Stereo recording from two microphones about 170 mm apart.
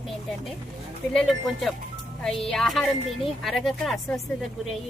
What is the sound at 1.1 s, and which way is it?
A woman's voice, centre (ahead or behind).